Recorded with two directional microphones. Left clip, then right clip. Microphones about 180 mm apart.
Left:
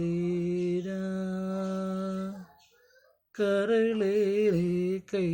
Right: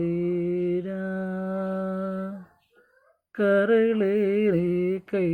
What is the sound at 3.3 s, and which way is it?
Mantra, 20° right (ahead or behind).